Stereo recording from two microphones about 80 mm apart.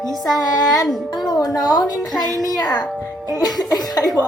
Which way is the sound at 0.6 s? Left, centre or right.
Centre.